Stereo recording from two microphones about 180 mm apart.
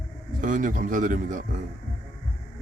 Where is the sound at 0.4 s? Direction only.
45° right (ahead or behind).